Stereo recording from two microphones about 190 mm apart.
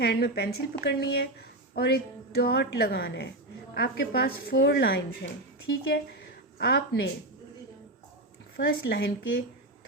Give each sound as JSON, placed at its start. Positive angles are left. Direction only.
{"t": 0.0, "sound": "a woman's voice", "side_deg": 55}
{"t": 8.5, "sound": "a woman's voice", "side_deg": 60}